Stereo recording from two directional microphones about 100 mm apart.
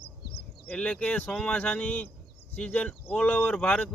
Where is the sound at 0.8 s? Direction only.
15° left (ahead or behind).